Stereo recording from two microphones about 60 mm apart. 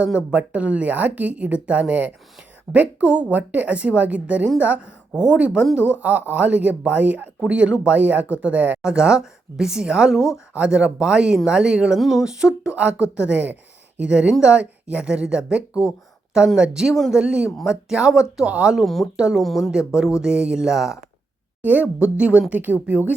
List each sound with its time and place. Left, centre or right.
0.3 s a woman's voice: right
8.8 s speech: centre
11.9 s speech: centre
12.2 s a woman's voice: centre
18.8 s speech: centre
19.1 s speech: centre
19.4 s speech: centre
19.9 s speech: centre
21.6 s a woman's voice: right